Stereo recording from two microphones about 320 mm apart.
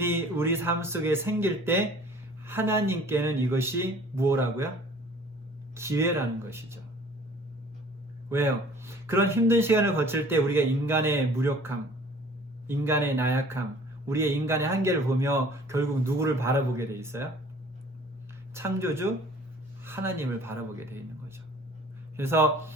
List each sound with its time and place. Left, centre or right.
0.0 s speech: centre
5.7 s speech: centre
8.3 s speech: centre
18.5 s speech: centre
22.1 s speech: centre